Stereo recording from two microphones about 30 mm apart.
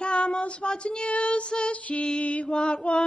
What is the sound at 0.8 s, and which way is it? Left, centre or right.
Child singing, left.